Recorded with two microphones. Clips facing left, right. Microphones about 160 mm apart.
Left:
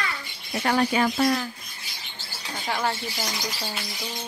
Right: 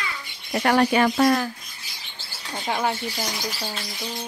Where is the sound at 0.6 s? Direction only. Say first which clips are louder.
Right 3 dB; 65° right (ahead or behind).